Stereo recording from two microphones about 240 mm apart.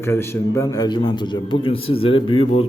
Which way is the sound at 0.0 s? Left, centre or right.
Centre.